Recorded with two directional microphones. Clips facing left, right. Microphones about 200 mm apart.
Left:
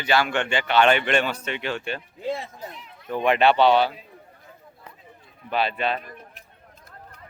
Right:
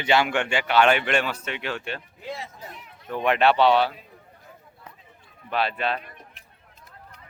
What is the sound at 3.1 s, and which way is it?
Speech, centre (ahead or behind).